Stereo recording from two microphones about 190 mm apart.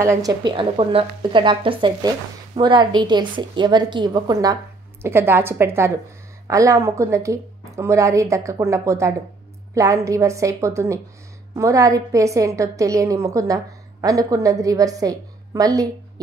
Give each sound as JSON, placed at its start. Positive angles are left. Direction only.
{"t": 0.0, "sound": "a woman's voice", "side_deg": -15}